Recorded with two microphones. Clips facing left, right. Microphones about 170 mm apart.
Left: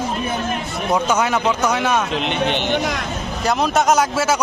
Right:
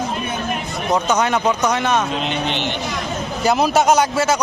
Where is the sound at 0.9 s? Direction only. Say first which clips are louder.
Right 1 dB; 5° left (ahead or behind).